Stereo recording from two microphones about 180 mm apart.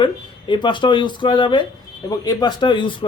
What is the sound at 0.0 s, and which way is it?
A man's voice, 25° left (ahead or behind).